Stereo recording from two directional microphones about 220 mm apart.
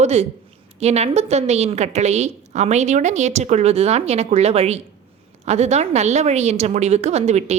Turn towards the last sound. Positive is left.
turn(degrees=-30)  # may be behind; listen again after turning